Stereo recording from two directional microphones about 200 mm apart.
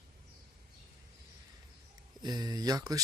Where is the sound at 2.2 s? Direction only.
20° right (ahead or behind).